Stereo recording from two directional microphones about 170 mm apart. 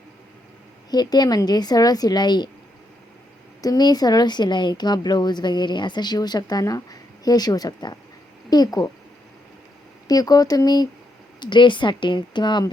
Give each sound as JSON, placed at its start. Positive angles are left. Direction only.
{"t": 0.9, "sound": "speech", "side_deg": 25}
{"t": 3.6, "sound": "speech", "side_deg": 20}
{"t": 10.1, "sound": "speech", "side_deg": 20}